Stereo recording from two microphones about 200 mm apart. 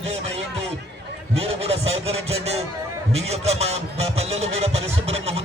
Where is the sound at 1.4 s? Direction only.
30° right (ahead or behind).